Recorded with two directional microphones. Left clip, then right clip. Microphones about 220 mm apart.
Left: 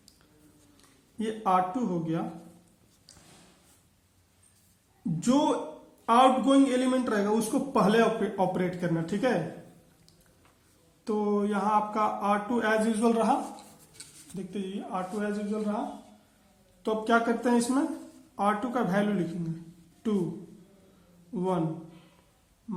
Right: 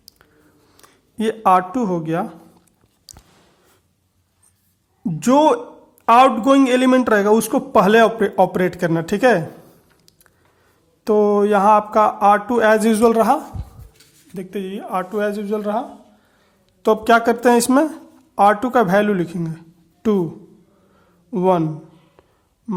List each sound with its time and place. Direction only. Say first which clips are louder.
1.2 s a man's voice: right 11 dB; 35° right (ahead or behind)
5.2 s a man's voice: right 12 dB; 35° right (ahead or behind)
11.0 s a man's voice: right 14 dB; 40° right (ahead or behind)
14.3 s speech: right 10 dB; 30° right (ahead or behind)
15.4 s speech: right 11 dB; 45° right (ahead or behind)
16.8 s a man's voice: right 12 dB; 40° right (ahead or behind)
21.3 s a man's voice: right 14 dB; 40° right (ahead or behind)